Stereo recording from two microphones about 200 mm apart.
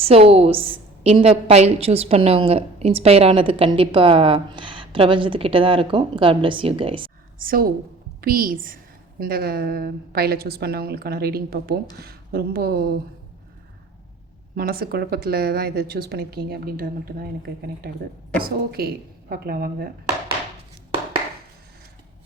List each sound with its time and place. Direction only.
0.0 s a woman's voice: 30° right (ahead or behind)
7.3 s a woman's voice: 45° right (ahead or behind)
14.5 s a woman's voice: 50° right (ahead or behind)
18.3 s a woman's voice: 50° right (ahead or behind)